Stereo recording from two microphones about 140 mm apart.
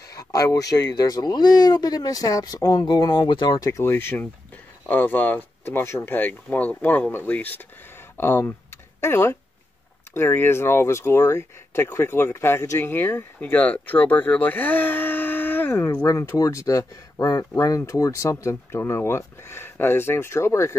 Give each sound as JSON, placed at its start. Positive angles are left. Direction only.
{"t": 0.1, "sound": "speech", "side_deg": 25}